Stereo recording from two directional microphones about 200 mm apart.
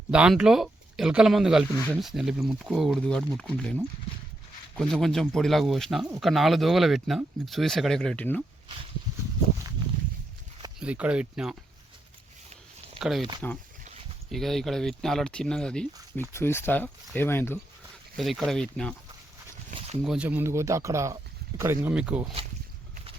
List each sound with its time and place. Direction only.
0.1 s speech: 5° right (ahead or behind)
4.8 s speech: 5° left (ahead or behind)
10.8 s speech: 5° right (ahead or behind)
12.5 s a sound: 30° right (ahead or behind)
13.0 s speech: centre (ahead or behind)
18.2 s speech: centre (ahead or behind)
20.0 s speech: 5° right (ahead or behind)